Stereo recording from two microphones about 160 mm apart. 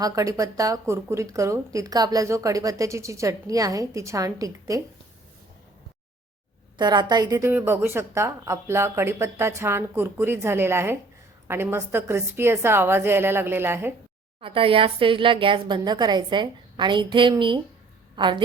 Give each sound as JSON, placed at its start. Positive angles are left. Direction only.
{"t": 0.0, "sound": "speech", "side_deg": -20}
{"t": 6.7, "sound": "a woman's voice", "side_deg": -25}
{"t": 14.4, "sound": "a woman's voice", "side_deg": -35}